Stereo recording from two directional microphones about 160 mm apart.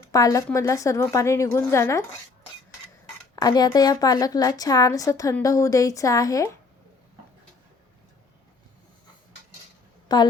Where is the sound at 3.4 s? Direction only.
25° left (ahead or behind).